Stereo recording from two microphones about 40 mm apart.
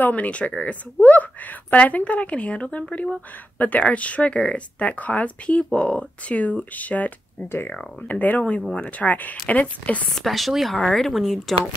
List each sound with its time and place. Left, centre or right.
0.0 s speech: left
1.0 s speech: left
5.6 s speech: left
8.1 s speech: left
10.1 s speech: centre